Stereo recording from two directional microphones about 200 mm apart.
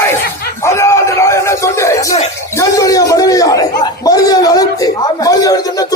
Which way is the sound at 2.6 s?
15° left (ahead or behind).